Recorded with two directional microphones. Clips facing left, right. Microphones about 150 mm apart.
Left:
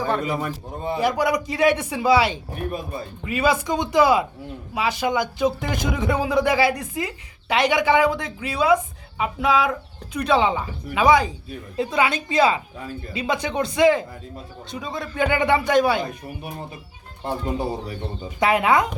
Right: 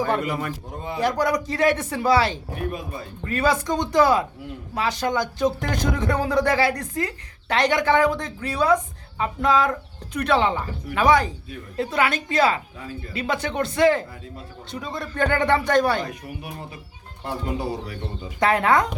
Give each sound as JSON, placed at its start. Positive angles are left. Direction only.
{"t": 0.9, "sound": "speech", "side_deg": 10}
{"t": 2.7, "sound": "speech", "side_deg": 30}
{"t": 3.2, "sound": "speech", "side_deg": 10}
{"t": 16.0, "sound": "speech", "side_deg": 30}
{"t": 18.3, "sound": "speech", "side_deg": 10}